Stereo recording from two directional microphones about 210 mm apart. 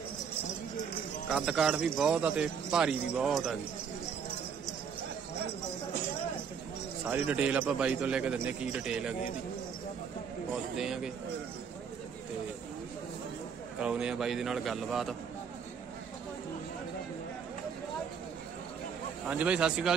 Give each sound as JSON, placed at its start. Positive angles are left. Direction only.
{"t": 1.3, "sound": "a man's voice", "side_deg": 0}
{"t": 7.1, "sound": "a man's voice", "side_deg": -5}
{"t": 10.8, "sound": "a man's voice", "side_deg": 0}
{"t": 13.7, "sound": "a man's voice", "side_deg": -5}
{"t": 19.2, "sound": "a man's voice", "side_deg": -5}